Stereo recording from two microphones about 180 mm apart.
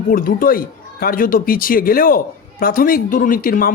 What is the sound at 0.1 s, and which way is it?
Speech, 50° left (ahead or behind).